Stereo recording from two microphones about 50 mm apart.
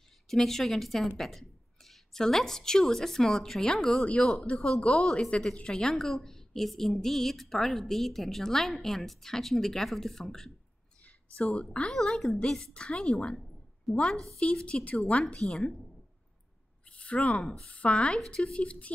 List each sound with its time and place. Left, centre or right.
0.3 s speech: centre
4.0 s a woman's voice: left
5.0 s a woman's voice: centre
11.3 s a woman's voice: left
11.7 s speech: centre
15.0 s a woman's voice: left
15.4 s speech: centre
16.9 s a sound: left
17.4 s speech: centre
17.6 s a woman's voice: left
18.1 s speech: centre
18.4 s a woman's voice: left